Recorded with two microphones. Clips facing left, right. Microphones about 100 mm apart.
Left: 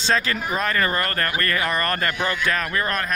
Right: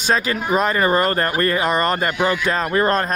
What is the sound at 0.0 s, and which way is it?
Speech, 15° right (ahead or behind).